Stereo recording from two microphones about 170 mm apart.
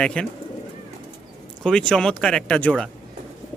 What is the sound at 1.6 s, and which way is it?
A man's voice, 5° left (ahead or behind).